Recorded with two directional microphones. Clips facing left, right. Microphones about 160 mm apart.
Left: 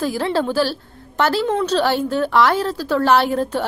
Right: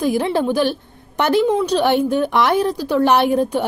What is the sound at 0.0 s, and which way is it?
A woman's voice, 15° right (ahead or behind).